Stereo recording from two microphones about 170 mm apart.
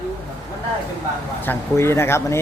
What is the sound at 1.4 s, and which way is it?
Speech, 15° left (ahead or behind).